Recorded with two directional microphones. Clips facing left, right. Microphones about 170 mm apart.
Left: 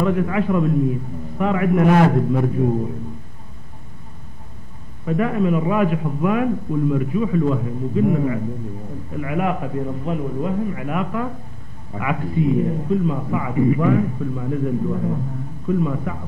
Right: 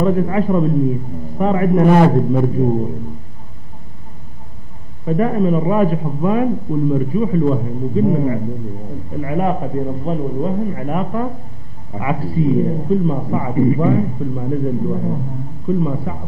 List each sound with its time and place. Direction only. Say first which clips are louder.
0.0 s a man's voice: right 3 dB; 35° right (ahead or behind)
5.0 s a man's voice: right 3 dB; 35° right (ahead or behind)